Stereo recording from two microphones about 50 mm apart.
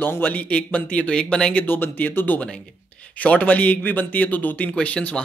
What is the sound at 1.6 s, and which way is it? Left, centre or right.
Speech, left.